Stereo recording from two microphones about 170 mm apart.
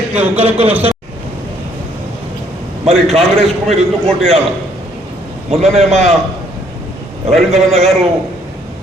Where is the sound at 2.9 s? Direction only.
Centre (ahead or behind).